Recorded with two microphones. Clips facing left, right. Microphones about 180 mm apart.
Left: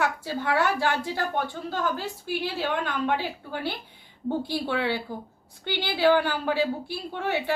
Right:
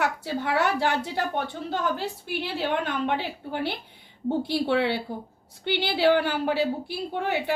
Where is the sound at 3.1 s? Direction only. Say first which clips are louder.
Even; 25° right (ahead or behind).